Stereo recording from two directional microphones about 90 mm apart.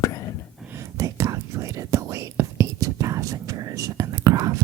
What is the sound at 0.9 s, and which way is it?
Whispering, 35° right (ahead or behind).